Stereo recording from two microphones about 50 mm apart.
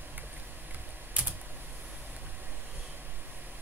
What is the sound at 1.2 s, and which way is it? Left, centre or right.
Typing, right.